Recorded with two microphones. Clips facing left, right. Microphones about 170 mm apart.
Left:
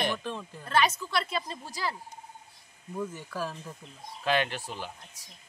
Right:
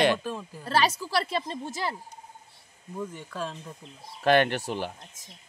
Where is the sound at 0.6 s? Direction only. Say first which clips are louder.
Right 1 dB; 35° right (ahead or behind).